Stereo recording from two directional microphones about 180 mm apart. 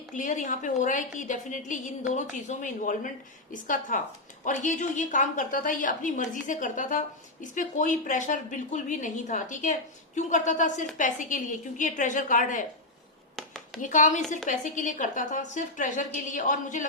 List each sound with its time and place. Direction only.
0.1 s a woman's voice: 45° left (ahead or behind)
13.8 s a woman's voice: 45° left (ahead or behind)